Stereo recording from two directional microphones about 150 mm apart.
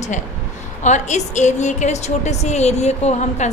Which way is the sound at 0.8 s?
50° left (ahead or behind).